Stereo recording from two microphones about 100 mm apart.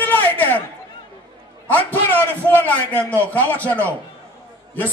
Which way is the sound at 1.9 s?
20° left (ahead or behind).